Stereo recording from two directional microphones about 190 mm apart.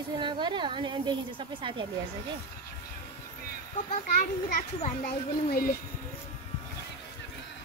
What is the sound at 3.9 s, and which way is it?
A child's voice, 40° left (ahead or behind).